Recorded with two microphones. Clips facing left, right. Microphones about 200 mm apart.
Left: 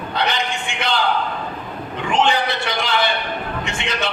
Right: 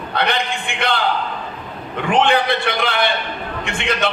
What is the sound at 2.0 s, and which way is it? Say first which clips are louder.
A man's voice: right 3 dB; 55° right (ahead or behind).